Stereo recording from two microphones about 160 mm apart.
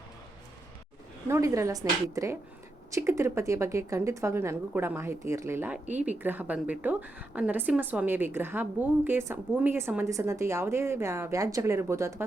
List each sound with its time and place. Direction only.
1.3 s a woman's voice: 20° right (ahead or behind)